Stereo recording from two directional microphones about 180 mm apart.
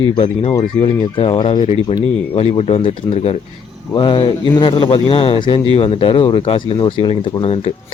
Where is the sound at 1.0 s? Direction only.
30° left (ahead or behind).